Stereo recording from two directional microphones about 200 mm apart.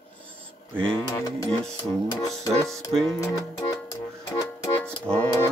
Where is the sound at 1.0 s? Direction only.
20° left (ahead or behind).